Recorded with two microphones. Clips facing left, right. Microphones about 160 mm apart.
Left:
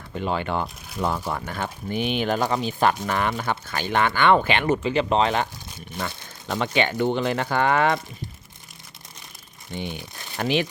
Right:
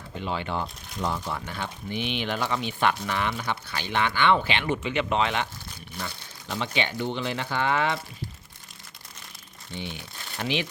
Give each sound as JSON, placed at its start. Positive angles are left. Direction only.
{"t": 0.2, "sound": "speech", "side_deg": 50}
{"t": 6.0, "sound": "speech", "side_deg": 55}
{"t": 9.7, "sound": "speech", "side_deg": 50}